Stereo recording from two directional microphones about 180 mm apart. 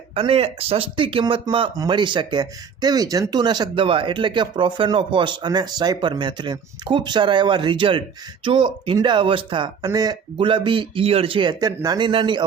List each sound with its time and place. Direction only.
0.1 s speech: 30° right (ahead or behind)